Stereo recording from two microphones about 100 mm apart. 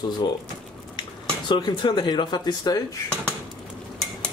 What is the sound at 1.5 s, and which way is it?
Speech, 50° left (ahead or behind).